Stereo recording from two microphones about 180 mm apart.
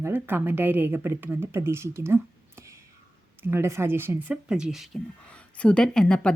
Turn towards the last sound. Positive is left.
turn(degrees=5)  # may be behind; listen again after turning